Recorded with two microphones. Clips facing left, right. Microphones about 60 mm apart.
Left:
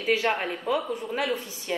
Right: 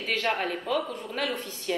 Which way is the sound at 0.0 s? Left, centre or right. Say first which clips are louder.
Left 3 dB; centre.